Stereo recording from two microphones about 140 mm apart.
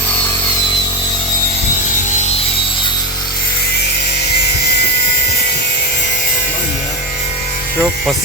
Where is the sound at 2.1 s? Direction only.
55° left (ahead or behind).